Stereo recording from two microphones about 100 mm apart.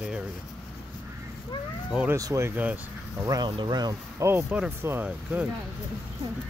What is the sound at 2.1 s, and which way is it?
Speech, 30° right (ahead or behind).